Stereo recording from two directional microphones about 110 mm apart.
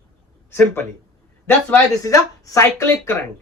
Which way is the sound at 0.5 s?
20° left (ahead or behind).